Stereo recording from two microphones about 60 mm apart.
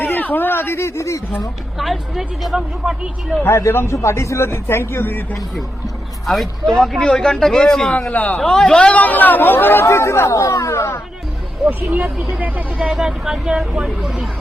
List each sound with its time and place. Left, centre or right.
0.0 s a sound: left
1.8 s speech: centre
3.4 s speech: left
6.2 s speech: centre
8.1 s speech: left
8.4 s speech: centre
9.0 s speech: left
9.8 s speech: left
11.6 s speech: right
12.0 s speech: centre